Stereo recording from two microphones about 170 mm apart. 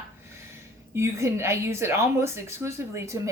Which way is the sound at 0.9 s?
15° right (ahead or behind).